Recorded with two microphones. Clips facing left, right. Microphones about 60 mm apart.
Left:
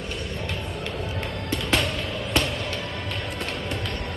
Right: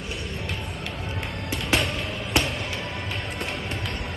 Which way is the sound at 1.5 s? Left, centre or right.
Centre.